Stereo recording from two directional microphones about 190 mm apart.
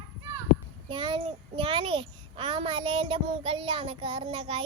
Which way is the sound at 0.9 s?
25° right (ahead or behind).